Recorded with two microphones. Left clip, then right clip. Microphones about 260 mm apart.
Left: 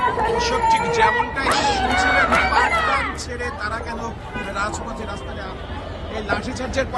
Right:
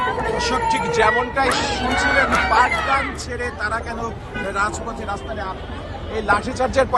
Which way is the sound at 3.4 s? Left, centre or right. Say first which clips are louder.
Right 4 dB; centre.